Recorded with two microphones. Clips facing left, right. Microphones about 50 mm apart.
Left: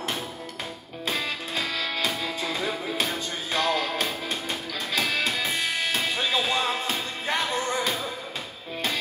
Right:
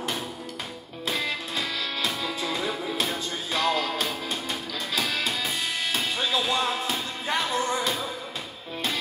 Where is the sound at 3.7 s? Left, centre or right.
Centre.